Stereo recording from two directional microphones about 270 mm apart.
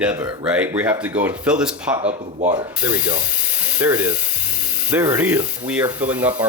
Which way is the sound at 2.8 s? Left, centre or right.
Centre.